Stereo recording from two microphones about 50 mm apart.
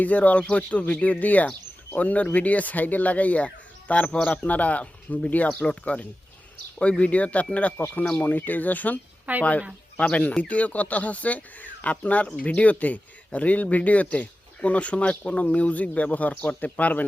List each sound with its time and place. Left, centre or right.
0.0 s speech: left
9.3 s speech: right
10.0 s speech: left